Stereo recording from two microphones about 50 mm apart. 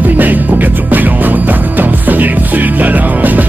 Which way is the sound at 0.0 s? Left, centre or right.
Right.